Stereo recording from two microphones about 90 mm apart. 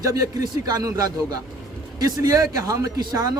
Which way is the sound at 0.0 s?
40° right (ahead or behind).